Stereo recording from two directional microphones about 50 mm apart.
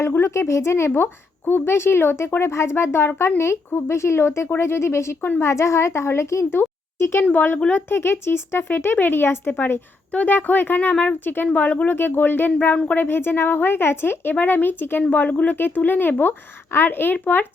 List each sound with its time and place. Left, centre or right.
0.2 s speech: left
7.3 s speech: left
7.7 s speech: left
10.1 s speech: left
11.9 s speech: left
14.3 s speech: left
15.1 s speech: left